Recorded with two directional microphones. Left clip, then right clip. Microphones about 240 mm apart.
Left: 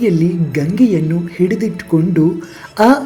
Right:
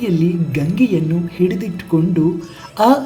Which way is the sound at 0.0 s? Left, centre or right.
Centre.